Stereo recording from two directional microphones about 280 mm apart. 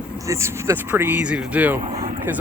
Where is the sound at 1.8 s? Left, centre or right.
Centre.